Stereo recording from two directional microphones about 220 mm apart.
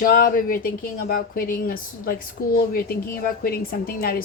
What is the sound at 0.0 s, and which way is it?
A woman's voice, 40° left (ahead or behind).